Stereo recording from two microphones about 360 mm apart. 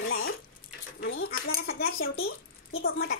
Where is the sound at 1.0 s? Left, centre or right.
Left.